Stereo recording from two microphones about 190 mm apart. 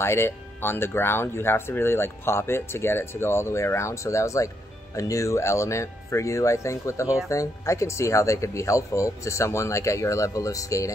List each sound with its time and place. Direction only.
0.0 s speech: 15° left (ahead or behind)